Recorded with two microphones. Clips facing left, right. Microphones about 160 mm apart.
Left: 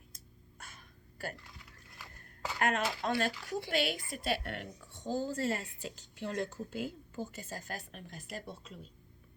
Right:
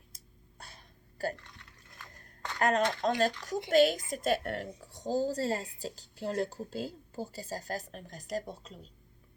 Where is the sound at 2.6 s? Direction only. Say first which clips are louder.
Right 5 dB; 40° right (ahead or behind).